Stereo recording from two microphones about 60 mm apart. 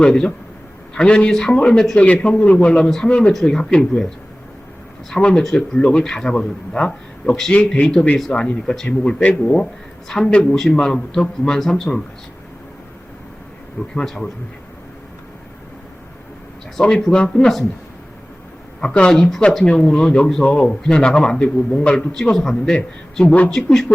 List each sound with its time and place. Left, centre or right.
0.0 s speech: centre
5.1 s speech: centre
13.9 s speech: centre
16.8 s speech: centre
18.8 s speech: centre
23.2 s speech: left
23.5 s speech: centre